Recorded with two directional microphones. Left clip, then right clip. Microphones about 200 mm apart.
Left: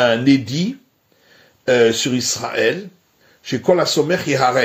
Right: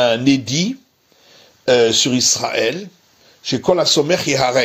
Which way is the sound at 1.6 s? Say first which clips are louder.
Right 1 dB; 15° right (ahead or behind).